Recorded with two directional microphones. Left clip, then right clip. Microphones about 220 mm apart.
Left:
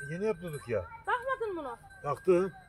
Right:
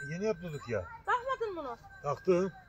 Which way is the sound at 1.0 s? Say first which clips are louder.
Right 1 dB; 35° left (ahead or behind).